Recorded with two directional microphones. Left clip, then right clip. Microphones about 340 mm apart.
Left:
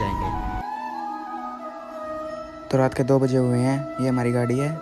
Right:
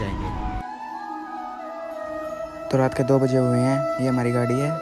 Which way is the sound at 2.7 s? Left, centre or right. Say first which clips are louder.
Even; centre.